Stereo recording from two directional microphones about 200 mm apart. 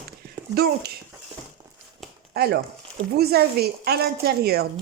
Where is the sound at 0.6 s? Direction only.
50° right (ahead or behind).